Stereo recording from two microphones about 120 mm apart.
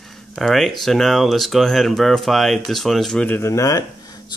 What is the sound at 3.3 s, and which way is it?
Speech, 20° left (ahead or behind).